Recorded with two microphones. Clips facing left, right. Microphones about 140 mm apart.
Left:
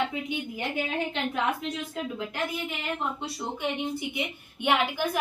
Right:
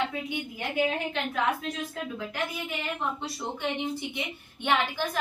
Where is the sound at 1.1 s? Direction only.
20° left (ahead or behind).